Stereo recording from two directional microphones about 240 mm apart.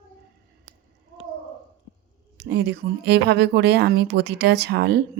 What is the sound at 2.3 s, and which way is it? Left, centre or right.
Speech, right.